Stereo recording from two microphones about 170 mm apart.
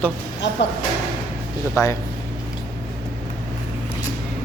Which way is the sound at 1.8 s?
20° left (ahead or behind).